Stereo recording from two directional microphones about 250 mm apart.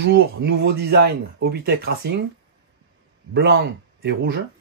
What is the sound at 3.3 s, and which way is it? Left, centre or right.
Speech, right.